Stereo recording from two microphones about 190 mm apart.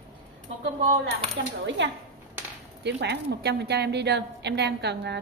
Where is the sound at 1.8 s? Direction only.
65° right (ahead or behind).